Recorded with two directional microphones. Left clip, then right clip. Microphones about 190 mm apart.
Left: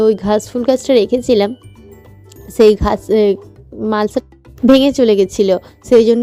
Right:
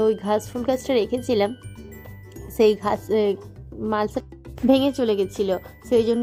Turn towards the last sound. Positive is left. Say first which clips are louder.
# left 10 dB
turn(degrees=30)  # may be behind; listen again after turning